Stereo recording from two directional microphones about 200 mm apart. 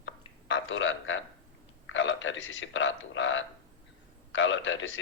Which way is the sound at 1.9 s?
70° left (ahead or behind).